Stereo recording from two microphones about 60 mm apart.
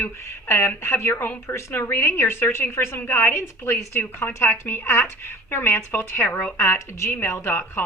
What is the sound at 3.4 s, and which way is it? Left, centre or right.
Speech, left.